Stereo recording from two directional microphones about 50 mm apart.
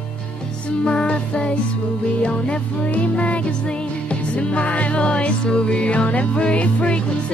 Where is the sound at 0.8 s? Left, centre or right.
Left.